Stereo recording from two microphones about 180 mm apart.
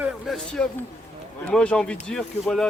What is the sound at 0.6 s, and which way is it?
Speech, 5° left (ahead or behind).